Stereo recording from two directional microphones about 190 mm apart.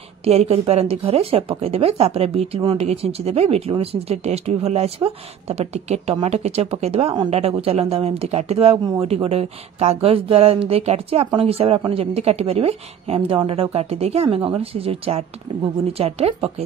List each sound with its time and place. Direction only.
0.2 s speech: 35° right (ahead or behind)